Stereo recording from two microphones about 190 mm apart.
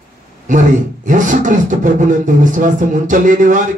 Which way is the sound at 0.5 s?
40° right (ahead or behind).